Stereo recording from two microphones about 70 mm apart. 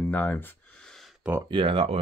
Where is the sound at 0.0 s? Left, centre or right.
Left.